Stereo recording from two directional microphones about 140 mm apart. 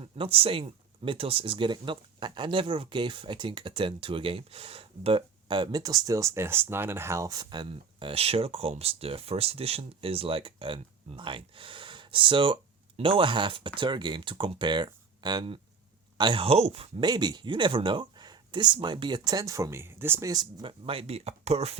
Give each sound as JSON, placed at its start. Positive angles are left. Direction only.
{"t": 0.0, "sound": "speech", "side_deg": -40}
{"t": 17.1, "sound": "speech", "side_deg": -30}